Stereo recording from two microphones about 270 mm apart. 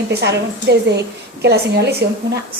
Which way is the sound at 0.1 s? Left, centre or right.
Right.